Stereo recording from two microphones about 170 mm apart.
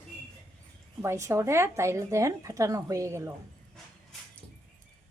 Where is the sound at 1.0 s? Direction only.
15° right (ahead or behind).